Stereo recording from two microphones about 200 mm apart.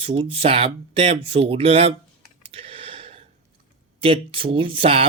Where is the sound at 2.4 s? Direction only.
30° right (ahead or behind).